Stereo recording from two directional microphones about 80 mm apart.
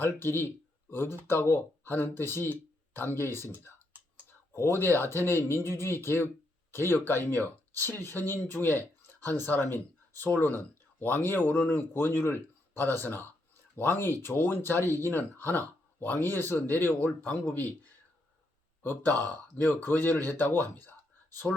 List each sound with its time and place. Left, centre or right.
0.0 s a man's voice: left
18.8 s a man's voice: left